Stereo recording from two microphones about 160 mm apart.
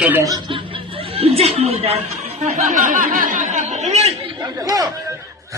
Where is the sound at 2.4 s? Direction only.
50° right (ahead or behind).